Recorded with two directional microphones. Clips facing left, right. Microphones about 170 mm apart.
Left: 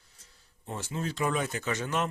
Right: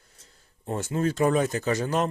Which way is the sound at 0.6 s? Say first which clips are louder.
Right 8 dB; 50° right (ahead or behind).